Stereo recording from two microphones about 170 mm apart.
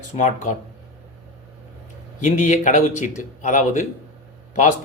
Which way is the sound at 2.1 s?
45° left (ahead or behind).